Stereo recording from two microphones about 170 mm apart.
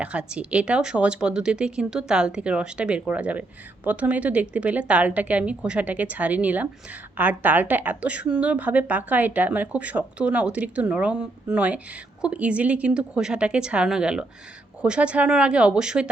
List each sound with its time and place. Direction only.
0.0 s a woman's voice: 5° right (ahead or behind)